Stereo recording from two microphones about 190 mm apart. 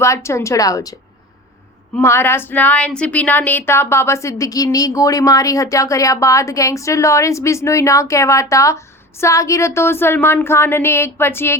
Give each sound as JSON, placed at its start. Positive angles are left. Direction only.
{"t": 0.0, "sound": "speech", "side_deg": 15}
{"t": 2.0, "sound": "speech", "side_deg": 10}